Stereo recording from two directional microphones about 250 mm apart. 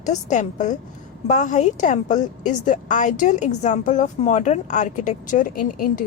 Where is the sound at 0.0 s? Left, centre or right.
Left.